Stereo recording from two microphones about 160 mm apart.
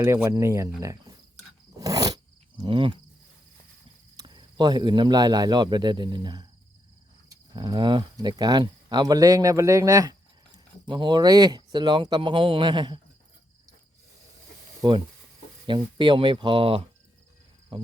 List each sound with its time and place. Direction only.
0.3 s speech: 15° right (ahead or behind)
1.7 s a sound: 20° right (ahead or behind)
4.2 s speech: 30° right (ahead or behind)
14.8 s speech: 25° right (ahead or behind)
17.7 s cricket: 35° right (ahead or behind)